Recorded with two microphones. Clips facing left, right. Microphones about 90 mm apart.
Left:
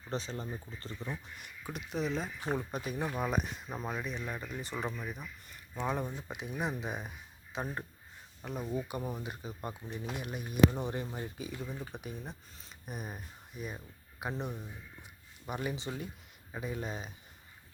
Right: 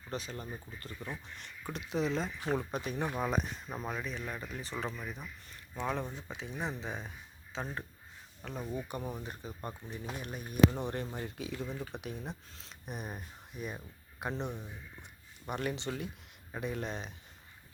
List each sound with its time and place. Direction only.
0.1 s speech: 30° left (ahead or behind); by 17.1 s 5° left (ahead or behind)